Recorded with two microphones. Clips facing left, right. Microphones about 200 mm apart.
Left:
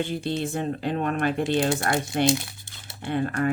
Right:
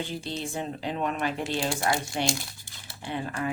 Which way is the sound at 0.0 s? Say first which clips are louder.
Left 6 dB; 55° left (ahead or behind).